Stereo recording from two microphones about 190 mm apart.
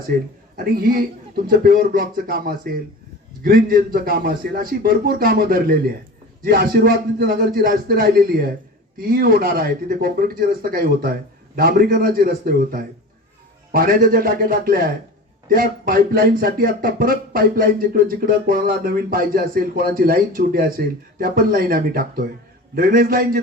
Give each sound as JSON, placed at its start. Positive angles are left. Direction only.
{"t": 0.5, "sound": "speech", "side_deg": -50}